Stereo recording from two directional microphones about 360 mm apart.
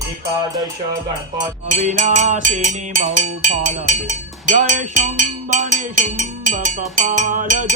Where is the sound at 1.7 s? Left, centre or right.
Centre.